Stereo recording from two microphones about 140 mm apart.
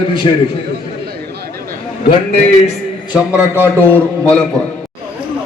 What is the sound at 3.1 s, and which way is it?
A man's voice, 20° left (ahead or behind).